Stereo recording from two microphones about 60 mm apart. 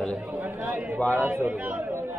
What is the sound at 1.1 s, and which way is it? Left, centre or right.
Speech, right.